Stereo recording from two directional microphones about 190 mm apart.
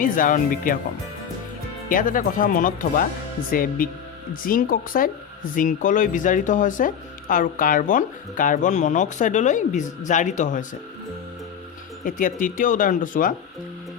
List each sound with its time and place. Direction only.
0.0 s speech: 45° left (ahead or behind)
1.9 s speech: 45° left (ahead or behind)
12.0 s speech: 45° left (ahead or behind)